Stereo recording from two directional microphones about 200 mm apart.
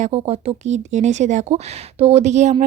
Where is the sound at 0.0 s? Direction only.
30° right (ahead or behind).